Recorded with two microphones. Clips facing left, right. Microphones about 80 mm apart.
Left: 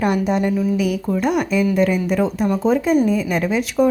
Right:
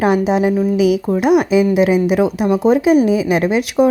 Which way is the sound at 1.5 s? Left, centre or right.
Right.